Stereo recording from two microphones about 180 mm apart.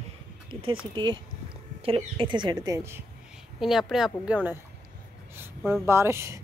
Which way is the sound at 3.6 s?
Centre (ahead or behind).